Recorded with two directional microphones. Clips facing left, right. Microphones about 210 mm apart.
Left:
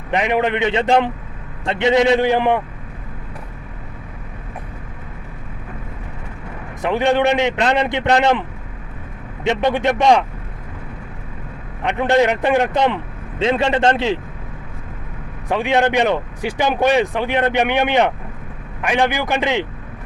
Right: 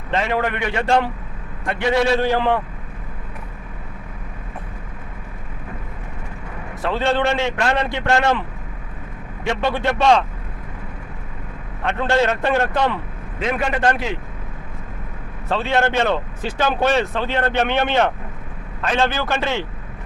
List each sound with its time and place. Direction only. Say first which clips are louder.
0.1 s a man's voice: left 3 dB; 15° left (ahead or behind)
6.8 s speech: left 4 dB; 15° left (ahead or behind)
11.8 s a man's voice: left 3 dB; 15° left (ahead or behind)
15.4 s speech: left 3 dB; 15° left (ahead or behind)